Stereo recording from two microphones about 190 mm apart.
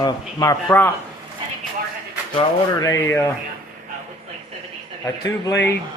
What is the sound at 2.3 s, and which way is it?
Speech, 20° left (ahead or behind).